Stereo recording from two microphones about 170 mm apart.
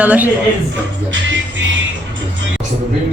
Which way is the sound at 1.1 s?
90° right.